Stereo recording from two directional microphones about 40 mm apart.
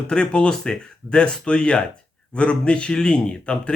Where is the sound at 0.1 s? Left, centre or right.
Left.